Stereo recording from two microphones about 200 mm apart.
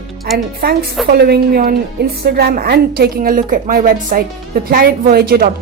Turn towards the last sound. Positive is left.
turn(degrees=-50)  # may be behind; listen again after turning